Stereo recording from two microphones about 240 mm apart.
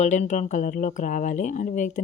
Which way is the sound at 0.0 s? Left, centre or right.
Left.